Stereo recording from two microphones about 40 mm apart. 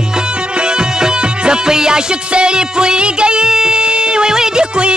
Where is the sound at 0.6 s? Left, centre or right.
Right.